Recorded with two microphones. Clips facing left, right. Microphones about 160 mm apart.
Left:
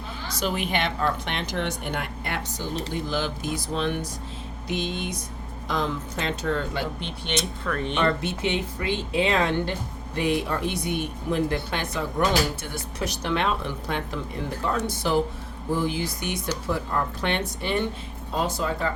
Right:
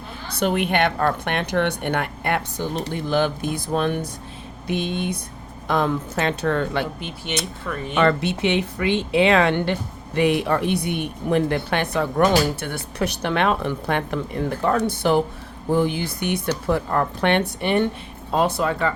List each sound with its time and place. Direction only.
0.3 s speech: 60° right (ahead or behind)
7.3 s speech: 5° right (ahead or behind)
7.9 s speech: 75° right (ahead or behind)